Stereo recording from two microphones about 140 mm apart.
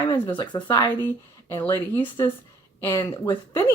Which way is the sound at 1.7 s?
35° left (ahead or behind).